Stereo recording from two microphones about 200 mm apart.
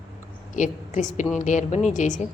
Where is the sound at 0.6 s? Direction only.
40° left (ahead or behind).